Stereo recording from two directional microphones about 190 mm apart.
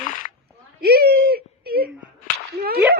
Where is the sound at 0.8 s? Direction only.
55° right (ahead or behind).